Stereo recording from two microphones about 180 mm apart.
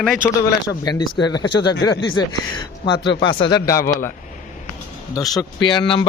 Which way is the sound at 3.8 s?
50° left (ahead or behind).